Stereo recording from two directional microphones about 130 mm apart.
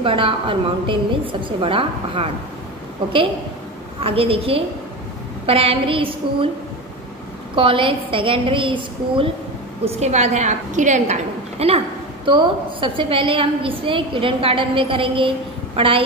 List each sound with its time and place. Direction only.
0.0 s a woman's voice: 40° right (ahead or behind)
4.0 s a woman's voice: 45° right (ahead or behind)
7.5 s a woman's voice: 40° right (ahead or behind)
9.8 s a woman's voice: 60° right (ahead or behind)
12.3 s a woman's voice: 40° right (ahead or behind)